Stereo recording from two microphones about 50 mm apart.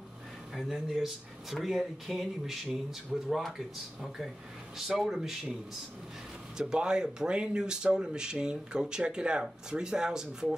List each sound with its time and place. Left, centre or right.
0.6 s speech: centre
6.5 s speech: centre